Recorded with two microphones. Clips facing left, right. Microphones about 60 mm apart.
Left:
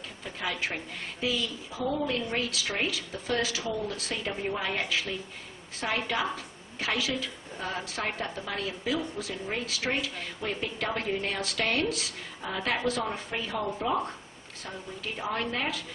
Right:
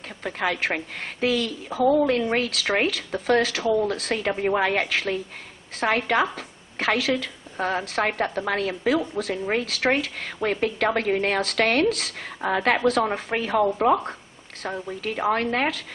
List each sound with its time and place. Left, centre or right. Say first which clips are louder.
0.2 s a woman's voice: right 8 dB; right